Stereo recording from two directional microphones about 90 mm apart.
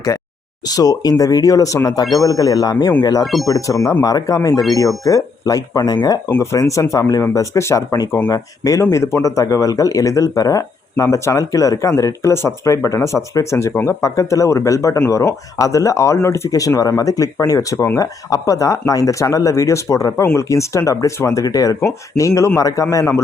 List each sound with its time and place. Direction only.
0.6 s speech: 45° left (ahead or behind)
6.4 s speech: 35° left (ahead or behind)
21.4 s speech: 40° left (ahead or behind)